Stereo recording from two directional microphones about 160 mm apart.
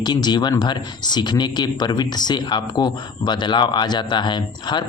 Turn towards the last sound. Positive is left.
turn(degrees=30)  # may be behind; listen again after turning